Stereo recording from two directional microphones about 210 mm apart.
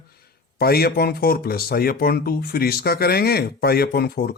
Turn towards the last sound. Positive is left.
turn(degrees=45)  # may be behind; listen again after turning